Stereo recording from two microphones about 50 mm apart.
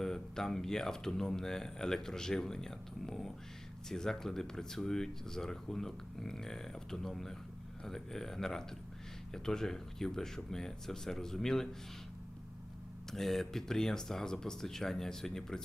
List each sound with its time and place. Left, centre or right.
0.0 s speech: centre
13.1 s speech: centre